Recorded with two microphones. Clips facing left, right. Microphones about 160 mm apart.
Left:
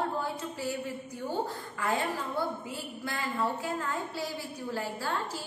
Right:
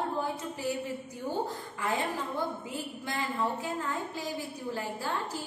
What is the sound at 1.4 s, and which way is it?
Speech, 20° right (ahead or behind).